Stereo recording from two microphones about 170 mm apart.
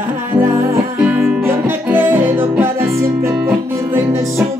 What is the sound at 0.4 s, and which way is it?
Music, 15° right (ahead or behind).